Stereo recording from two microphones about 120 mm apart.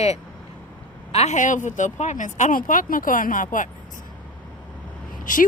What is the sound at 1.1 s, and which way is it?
Speech, 70° left (ahead or behind).